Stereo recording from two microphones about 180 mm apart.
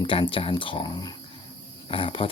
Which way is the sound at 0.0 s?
30° left (ahead or behind).